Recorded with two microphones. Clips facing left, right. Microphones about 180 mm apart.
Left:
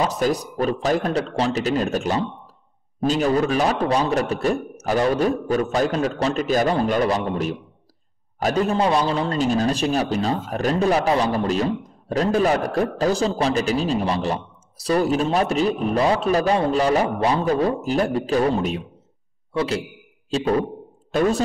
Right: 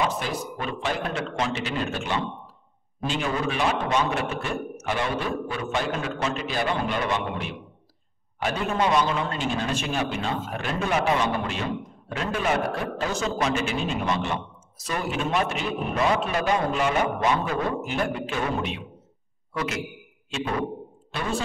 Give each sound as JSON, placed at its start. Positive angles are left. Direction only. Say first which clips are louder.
{"t": 0.0, "sound": "a man's voice", "louder": "left 6 dB", "side_deg": 40}